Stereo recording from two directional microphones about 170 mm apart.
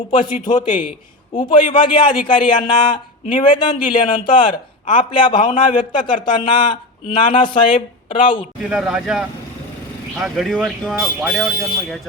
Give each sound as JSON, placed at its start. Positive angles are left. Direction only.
{"t": 0.1, "sound": "speech", "side_deg": 25}
{"t": 8.7, "sound": "speech", "side_deg": -5}